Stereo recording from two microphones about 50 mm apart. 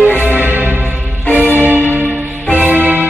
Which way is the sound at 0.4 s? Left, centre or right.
Right.